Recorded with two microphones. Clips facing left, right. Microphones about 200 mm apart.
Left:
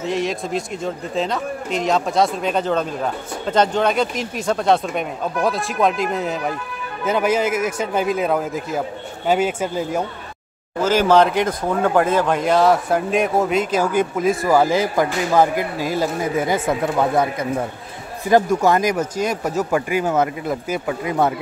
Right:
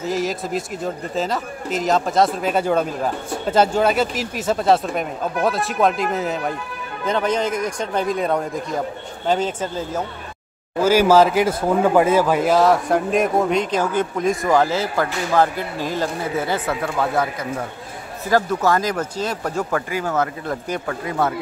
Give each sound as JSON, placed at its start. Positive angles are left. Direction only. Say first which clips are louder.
{"t": 0.0, "sound": "a man's voice", "louder": "left 1 dB", "side_deg": 0}
{"t": 10.8, "sound": "a man's voice", "louder": "right 1 dB", "side_deg": -10}